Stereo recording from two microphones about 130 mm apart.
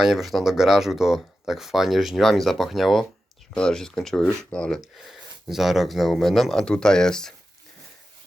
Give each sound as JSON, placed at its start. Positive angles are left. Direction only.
{"t": 0.0, "sound": "speech", "side_deg": -5}